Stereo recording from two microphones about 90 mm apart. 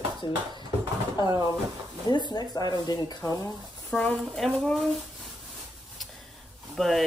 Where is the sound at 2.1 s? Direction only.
55° left (ahead or behind).